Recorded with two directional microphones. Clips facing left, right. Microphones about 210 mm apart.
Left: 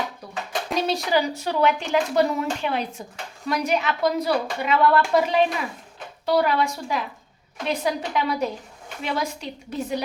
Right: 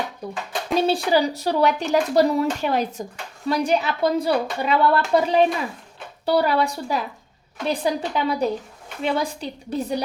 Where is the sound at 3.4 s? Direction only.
30° right (ahead or behind).